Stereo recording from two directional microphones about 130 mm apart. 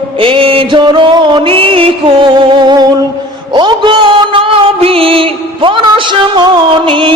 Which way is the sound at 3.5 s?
35° right (ahead or behind).